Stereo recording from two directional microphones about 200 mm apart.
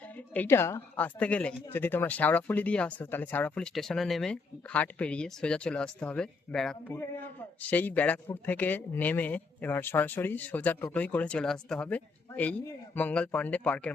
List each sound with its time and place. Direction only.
0.2 s speech: 10° left (ahead or behind)